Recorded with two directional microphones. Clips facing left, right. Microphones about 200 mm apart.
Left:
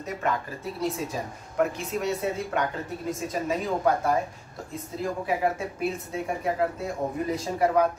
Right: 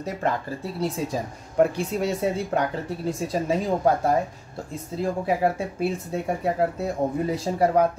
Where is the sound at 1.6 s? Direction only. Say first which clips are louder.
Right 5 dB; 35° right (ahead or behind).